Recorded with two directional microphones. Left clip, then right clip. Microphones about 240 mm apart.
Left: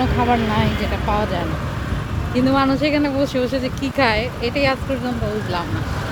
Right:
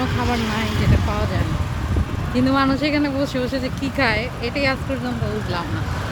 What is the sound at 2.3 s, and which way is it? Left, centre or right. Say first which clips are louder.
Speech: left 2 dB; centre.